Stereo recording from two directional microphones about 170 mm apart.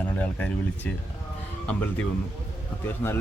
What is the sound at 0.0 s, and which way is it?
Speech, 10° left (ahead or behind).